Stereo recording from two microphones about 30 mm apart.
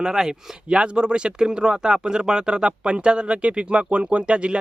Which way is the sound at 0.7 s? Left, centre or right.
Right.